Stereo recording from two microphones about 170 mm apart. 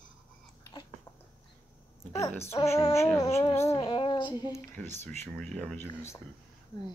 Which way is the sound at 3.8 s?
30° left (ahead or behind).